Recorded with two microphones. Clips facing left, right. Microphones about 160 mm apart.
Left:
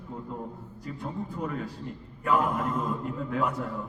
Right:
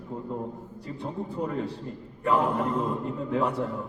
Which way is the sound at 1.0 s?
30° right (ahead or behind).